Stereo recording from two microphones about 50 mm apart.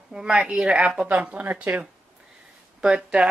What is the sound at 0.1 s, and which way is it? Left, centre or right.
Speech, centre.